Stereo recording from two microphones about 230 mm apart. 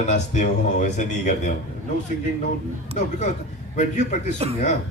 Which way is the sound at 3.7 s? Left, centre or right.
Left.